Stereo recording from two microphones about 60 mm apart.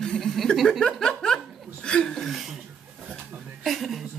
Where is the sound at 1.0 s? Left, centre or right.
Centre.